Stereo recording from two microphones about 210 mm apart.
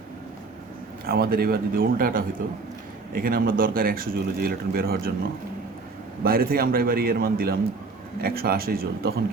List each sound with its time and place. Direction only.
1.0 s speech: 45° right (ahead or behind)
6.2 s speech: 45° right (ahead or behind)